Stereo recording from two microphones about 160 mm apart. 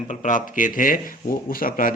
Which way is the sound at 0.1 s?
55° left (ahead or behind).